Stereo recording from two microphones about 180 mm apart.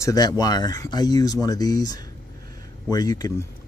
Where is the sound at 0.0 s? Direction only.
20° left (ahead or behind).